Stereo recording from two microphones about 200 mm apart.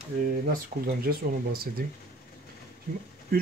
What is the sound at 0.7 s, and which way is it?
Speech, 40° right (ahead or behind).